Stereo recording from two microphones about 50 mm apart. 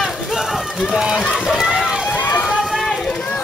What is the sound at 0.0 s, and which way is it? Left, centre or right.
Run, centre.